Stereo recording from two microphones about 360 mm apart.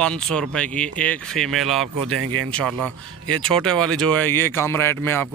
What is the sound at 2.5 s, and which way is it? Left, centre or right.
Speech, centre.